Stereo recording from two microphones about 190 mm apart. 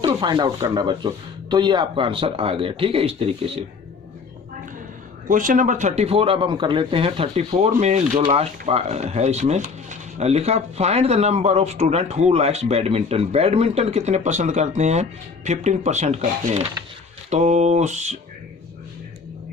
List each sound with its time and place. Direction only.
0.0 s speech: 20° right (ahead or behind)
5.3 s speech: 45° right (ahead or behind)